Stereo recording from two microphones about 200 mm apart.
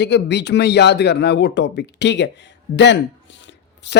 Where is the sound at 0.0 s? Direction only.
60° left (ahead or behind).